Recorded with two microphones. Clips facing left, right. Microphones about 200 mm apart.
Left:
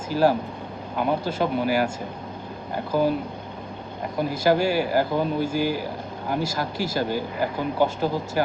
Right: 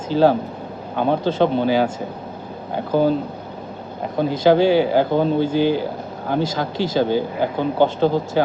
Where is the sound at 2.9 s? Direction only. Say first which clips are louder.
Right 5 dB; 25° right (ahead or behind).